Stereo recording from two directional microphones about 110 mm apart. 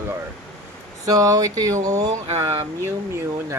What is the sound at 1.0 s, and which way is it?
Speech, 35° right (ahead or behind).